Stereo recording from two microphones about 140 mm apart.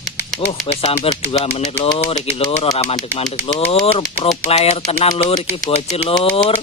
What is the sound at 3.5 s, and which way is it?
Speech, 45° left (ahead or behind).